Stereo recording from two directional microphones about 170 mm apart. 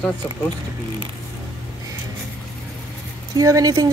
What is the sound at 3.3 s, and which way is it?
Speech, 20° right (ahead or behind).